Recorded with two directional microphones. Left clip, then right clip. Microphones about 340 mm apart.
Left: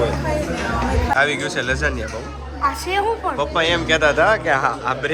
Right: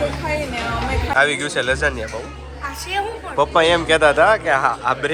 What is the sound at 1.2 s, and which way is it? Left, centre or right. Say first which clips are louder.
Speech: right 5 dB; centre.